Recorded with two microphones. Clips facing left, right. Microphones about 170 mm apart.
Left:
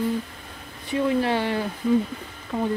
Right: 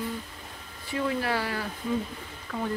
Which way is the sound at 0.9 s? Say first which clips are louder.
Left 6 dB; 25° left (ahead or behind).